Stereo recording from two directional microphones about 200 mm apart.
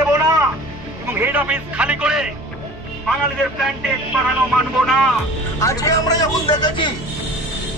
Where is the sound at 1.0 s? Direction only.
10° right (ahead or behind).